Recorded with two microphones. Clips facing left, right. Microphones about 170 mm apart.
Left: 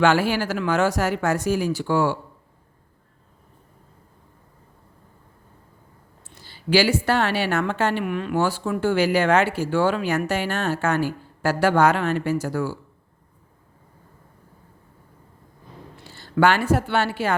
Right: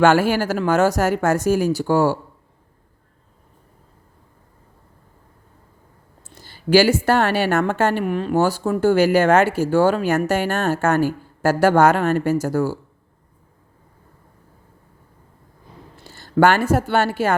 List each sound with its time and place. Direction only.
0.0 s a woman's voice: 45° right (ahead or behind)
6.3 s a woman's voice: 45° right (ahead or behind)
16.0 s speech: 45° right (ahead or behind)